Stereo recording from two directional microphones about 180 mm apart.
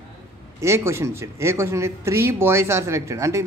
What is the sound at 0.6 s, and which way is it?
Speech, 15° right (ahead or behind).